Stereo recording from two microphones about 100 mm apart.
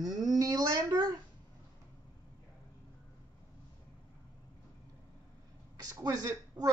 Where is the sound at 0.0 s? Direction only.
35° right (ahead or behind).